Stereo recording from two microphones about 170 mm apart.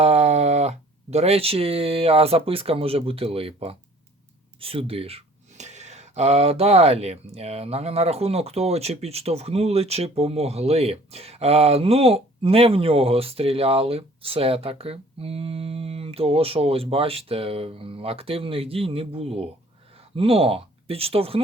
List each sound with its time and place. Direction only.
0.0 s speech: 40° right (ahead or behind)